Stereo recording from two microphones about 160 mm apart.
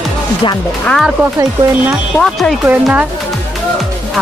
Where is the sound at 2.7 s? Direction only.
10° right (ahead or behind).